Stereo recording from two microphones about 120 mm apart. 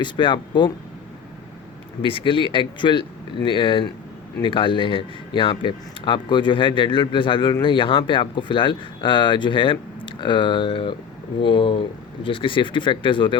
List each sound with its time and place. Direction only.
0.0 s speech: 40° left (ahead or behind)
2.0 s speech: 45° left (ahead or behind)